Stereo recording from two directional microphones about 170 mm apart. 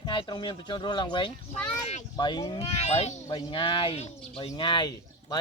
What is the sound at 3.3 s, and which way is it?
Speech, 30° left (ahead or behind).